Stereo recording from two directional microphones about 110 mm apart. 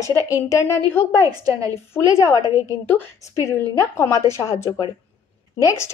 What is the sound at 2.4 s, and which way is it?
Speech, 25° right (ahead or behind).